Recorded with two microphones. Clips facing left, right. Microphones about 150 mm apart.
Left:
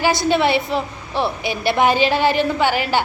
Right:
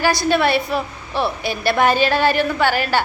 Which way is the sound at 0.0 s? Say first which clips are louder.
Even; 20° left (ahead or behind).